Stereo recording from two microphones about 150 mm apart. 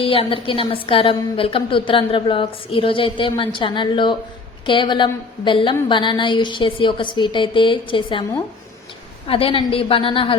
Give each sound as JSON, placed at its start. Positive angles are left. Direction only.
{"t": 0.0, "sound": "a woman's voice", "side_deg": 40}
{"t": 9.2, "sound": "a woman's voice", "side_deg": 40}